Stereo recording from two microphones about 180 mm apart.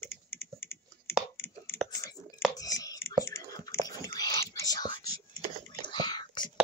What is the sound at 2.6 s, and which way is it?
Chewing, 20° left (ahead or behind).